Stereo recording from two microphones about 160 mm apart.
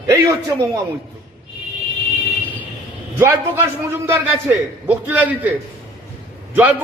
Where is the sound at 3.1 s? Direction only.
15° right (ahead or behind).